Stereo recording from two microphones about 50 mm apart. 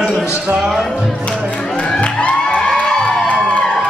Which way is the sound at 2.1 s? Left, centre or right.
Left.